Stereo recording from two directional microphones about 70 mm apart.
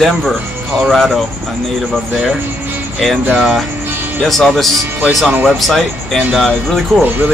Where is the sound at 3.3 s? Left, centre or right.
Centre.